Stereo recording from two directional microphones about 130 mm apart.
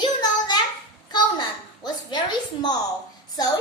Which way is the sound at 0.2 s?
30° left (ahead or behind).